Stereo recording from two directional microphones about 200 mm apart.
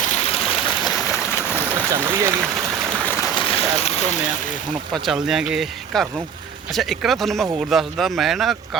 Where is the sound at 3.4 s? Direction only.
30° left (ahead or behind).